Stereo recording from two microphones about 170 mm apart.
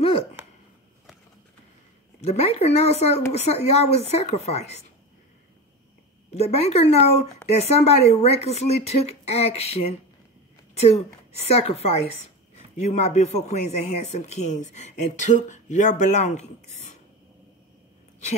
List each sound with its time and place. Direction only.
0.0 s a sound: 35° left (ahead or behind)
2.2 s speech: 40° left (ahead or behind)
6.3 s a woman's voice: 40° left (ahead or behind)